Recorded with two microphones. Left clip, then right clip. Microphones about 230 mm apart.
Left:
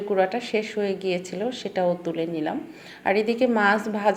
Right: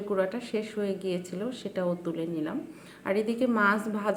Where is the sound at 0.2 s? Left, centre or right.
Centre.